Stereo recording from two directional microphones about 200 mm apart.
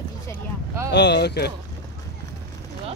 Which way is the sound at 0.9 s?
60° left (ahead or behind).